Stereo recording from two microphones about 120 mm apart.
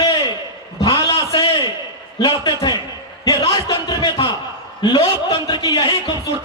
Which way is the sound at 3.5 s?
30° left (ahead or behind).